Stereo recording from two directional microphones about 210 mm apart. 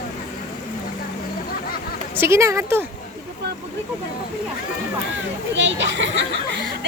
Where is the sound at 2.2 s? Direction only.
15° right (ahead or behind).